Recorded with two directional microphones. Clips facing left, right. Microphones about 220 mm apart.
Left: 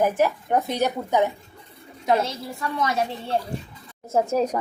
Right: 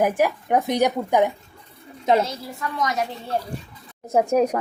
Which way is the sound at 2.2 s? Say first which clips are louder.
Even; 30° left (ahead or behind).